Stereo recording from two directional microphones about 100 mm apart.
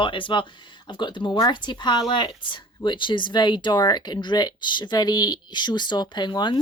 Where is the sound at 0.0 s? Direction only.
55° left (ahead or behind).